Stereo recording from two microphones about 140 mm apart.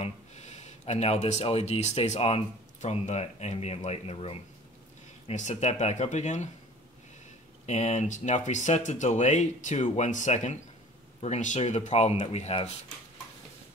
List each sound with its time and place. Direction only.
0.0 s speech: 55° left (ahead or behind)
5.3 s speech: 55° left (ahead or behind)
7.6 s speech: 55° left (ahead or behind)